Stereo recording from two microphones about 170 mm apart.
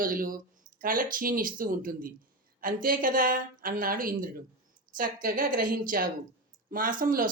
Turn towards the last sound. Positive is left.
turn(degrees=-55)  # may be behind; listen again after turning